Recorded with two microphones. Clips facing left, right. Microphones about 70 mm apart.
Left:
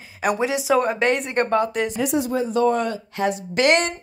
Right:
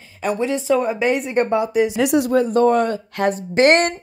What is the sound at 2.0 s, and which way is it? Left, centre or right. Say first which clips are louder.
A woman's voice: right 4 dB; right.